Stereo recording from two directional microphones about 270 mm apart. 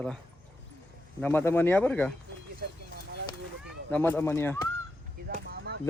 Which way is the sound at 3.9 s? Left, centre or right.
Centre.